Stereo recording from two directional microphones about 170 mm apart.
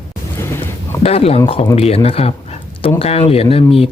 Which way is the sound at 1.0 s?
35° left (ahead or behind).